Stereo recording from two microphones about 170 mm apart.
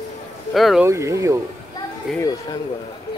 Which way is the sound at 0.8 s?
15° right (ahead or behind).